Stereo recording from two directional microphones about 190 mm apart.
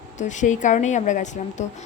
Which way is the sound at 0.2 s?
40° left (ahead or behind).